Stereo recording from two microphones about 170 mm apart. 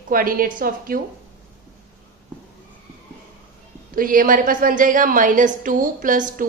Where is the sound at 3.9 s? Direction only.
55° right (ahead or behind).